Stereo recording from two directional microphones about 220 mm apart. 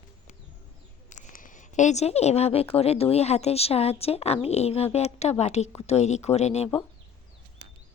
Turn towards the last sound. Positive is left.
turn(degrees=30)  # may be behind; listen again after turning